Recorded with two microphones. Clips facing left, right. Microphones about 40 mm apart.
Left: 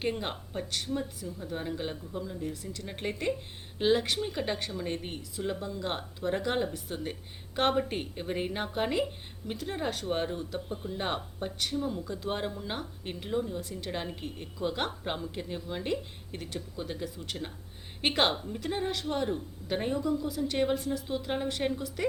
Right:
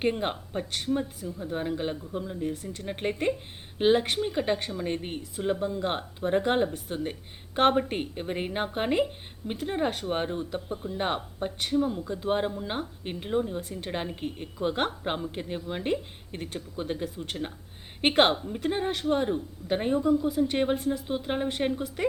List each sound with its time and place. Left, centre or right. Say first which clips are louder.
0.0 s speech: right 5 dB; right
7.5 s speech: right 5 dB; right
7.8 s speech: right 3 dB; right
13.6 s speech: right 2 dB; right
13.9 s speech: right 5 dB; right
19.3 s speech: right 4 dB; centre